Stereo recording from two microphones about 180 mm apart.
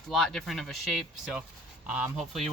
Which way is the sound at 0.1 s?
Centre (ahead or behind).